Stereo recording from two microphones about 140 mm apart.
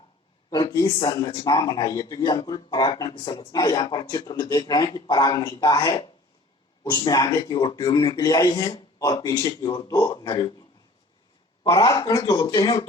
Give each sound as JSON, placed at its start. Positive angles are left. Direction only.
{"t": 0.5, "sound": "speech", "side_deg": 30}
{"t": 11.8, "sound": "speech", "side_deg": 25}